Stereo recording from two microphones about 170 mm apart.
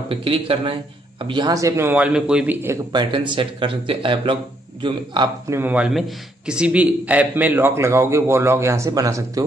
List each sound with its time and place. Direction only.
0.1 s a man's voice: 30° right (ahead or behind)
5.6 s a man's voice: 10° right (ahead or behind)